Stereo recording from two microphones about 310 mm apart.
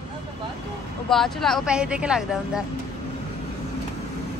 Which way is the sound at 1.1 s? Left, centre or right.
Centre.